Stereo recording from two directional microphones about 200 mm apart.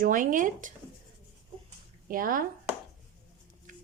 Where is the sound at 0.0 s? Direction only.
45° right (ahead or behind).